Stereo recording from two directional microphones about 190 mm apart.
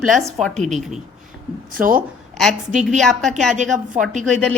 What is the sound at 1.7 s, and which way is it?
Speech, 45° right (ahead or behind).